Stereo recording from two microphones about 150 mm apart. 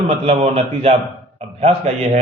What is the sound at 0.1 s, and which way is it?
A man's voice, 40° right (ahead or behind).